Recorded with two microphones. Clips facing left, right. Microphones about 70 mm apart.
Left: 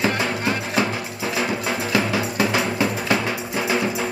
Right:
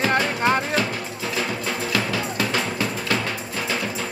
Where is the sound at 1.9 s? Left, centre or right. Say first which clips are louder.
Left 4 dB; centre.